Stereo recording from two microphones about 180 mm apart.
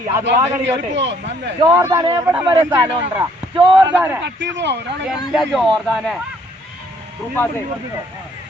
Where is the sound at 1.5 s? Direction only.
20° right (ahead or behind).